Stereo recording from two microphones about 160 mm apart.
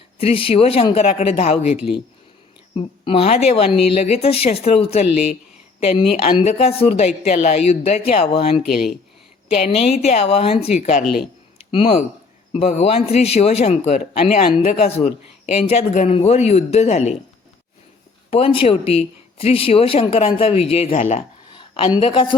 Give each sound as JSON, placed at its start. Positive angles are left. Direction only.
{"t": 0.2, "sound": "speech", "side_deg": 35}
{"t": 8.6, "sound": "speech", "side_deg": 0}
{"t": 9.6, "sound": "a man's voice", "side_deg": 40}
{"t": 16.0, "sound": "speech", "side_deg": 40}
{"t": 18.3, "sound": "speech", "side_deg": 40}
{"t": 21.5, "sound": "a woman's voice", "side_deg": 30}